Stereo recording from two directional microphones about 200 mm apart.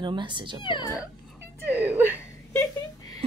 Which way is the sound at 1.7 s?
10° right (ahead or behind).